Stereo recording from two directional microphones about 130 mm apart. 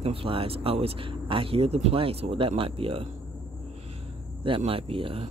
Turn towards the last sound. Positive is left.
turn(degrees=-45)  # may be behind; listen again after turning